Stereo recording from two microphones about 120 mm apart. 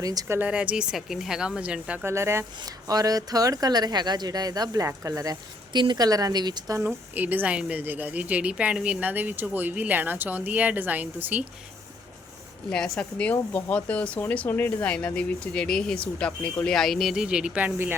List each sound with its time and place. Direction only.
0.0 s speech: 30° right (ahead or behind)
0.3 s a woman's voice: 10° right (ahead or behind)
2.0 s speech: 20° right (ahead or behind)
6.7 s a woman's voice: 15° right (ahead or behind)
12.7 s a woman's voice: 5° left (ahead or behind); by 17.9 s 15° right (ahead or behind)